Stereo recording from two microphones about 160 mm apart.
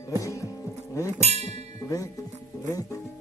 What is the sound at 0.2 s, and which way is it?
Music, 20° left (ahead or behind).